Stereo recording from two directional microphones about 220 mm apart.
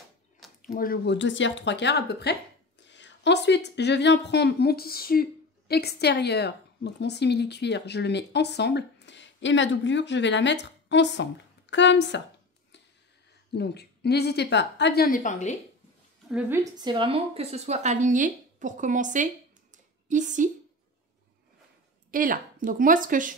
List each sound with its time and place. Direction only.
0.6 s a woman's voice: 40° left (ahead or behind)
13.5 s a woman's voice: 50° left (ahead or behind)
16.3 s a woman's voice: 5° right (ahead or behind)
16.8 s speech: 25° right (ahead or behind)
22.1 s a woman's voice: 40° right (ahead or behind)